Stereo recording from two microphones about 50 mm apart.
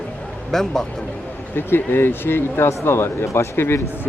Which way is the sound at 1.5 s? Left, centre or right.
Left.